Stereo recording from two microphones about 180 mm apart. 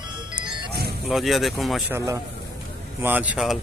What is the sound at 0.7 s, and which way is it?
Music, 60° right (ahead or behind).